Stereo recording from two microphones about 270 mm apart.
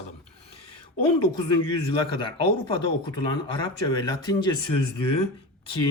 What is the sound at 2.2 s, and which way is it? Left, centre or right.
Speech, centre.